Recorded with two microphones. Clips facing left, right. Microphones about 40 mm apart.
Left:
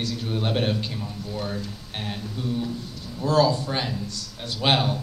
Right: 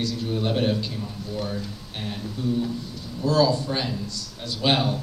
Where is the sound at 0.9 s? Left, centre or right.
Centre.